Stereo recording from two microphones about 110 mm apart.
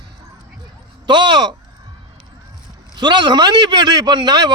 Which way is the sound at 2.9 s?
45° right (ahead or behind).